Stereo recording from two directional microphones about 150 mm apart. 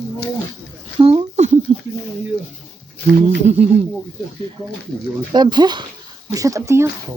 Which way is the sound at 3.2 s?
45° right (ahead or behind).